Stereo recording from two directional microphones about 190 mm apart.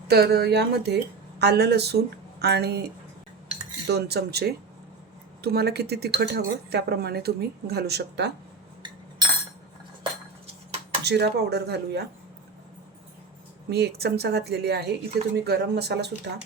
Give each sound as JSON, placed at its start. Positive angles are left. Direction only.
{"t": 0.1, "sound": "a woman's voice", "side_deg": -55}
{"t": 3.8, "sound": "a woman's voice", "side_deg": -60}
{"t": 10.0, "sound": "a sound", "side_deg": -30}
{"t": 11.0, "sound": "a woman's voice", "side_deg": -60}
{"t": 13.7, "sound": "a woman's voice", "side_deg": -60}